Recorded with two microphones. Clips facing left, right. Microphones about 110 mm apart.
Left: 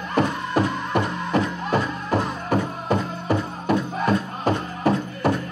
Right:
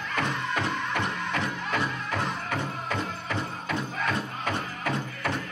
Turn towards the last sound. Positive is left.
turn(degrees=30)  # may be behind; listen again after turning